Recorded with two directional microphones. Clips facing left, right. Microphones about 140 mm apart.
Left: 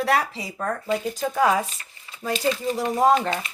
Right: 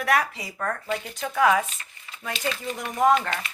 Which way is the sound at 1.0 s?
35° left (ahead or behind).